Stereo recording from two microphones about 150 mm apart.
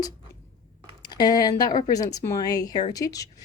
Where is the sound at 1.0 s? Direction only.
30° left (ahead or behind).